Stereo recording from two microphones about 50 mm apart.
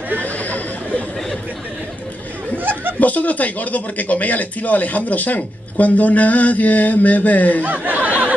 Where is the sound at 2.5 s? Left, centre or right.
Right.